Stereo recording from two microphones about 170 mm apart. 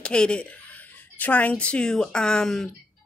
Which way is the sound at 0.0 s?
5° left (ahead or behind).